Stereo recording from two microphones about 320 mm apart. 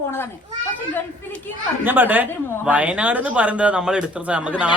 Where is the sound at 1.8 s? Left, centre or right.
Centre.